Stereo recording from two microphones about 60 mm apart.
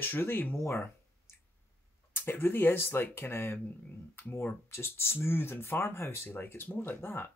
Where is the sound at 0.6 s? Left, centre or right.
Left.